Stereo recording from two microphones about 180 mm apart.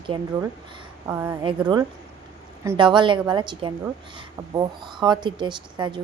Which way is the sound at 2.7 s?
25° right (ahead or behind).